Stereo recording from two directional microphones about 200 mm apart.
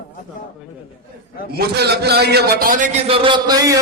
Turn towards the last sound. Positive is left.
turn(degrees=-20)  # may be behind; listen again after turning